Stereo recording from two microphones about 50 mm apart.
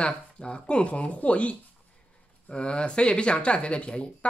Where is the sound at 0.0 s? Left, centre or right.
Left.